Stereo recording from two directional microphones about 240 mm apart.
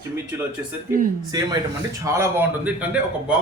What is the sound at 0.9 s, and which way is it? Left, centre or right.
Speech, centre.